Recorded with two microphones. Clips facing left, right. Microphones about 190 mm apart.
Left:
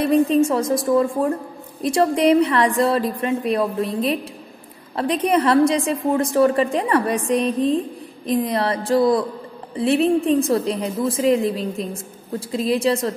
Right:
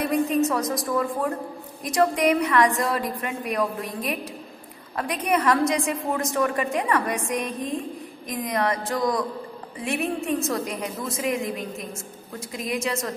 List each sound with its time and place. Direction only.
0.0 s a woman's voice: 30° left (ahead or behind)